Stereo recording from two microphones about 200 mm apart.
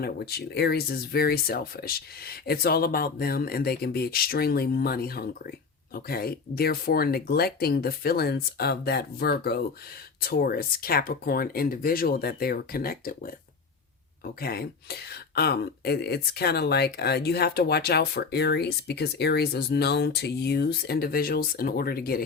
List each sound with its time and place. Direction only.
0.0 s speech: 50° left (ahead or behind)
14.4 s speech: 50° left (ahead or behind)